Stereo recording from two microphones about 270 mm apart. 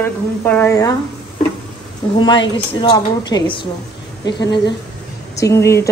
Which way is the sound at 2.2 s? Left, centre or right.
Centre.